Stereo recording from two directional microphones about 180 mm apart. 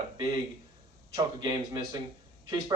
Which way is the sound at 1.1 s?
20° right (ahead or behind).